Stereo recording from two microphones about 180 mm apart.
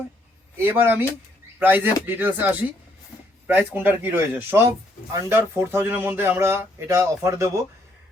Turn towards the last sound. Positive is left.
turn(degrees=-15)  # may be behind; listen again after turning